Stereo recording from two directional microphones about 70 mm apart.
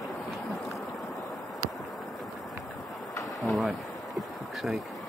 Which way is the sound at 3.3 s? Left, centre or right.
Centre.